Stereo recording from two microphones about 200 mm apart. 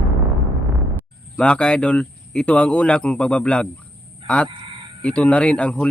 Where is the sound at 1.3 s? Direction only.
5° left (ahead or behind).